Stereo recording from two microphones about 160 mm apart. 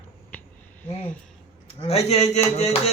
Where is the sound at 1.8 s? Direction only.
40° left (ahead or behind).